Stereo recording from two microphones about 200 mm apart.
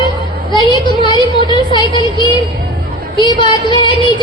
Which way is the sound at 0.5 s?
25° left (ahead or behind).